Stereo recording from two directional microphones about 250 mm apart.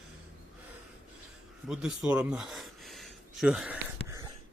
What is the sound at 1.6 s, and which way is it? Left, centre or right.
Speech, centre.